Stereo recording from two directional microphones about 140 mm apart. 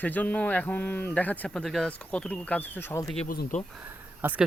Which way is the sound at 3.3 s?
90° left.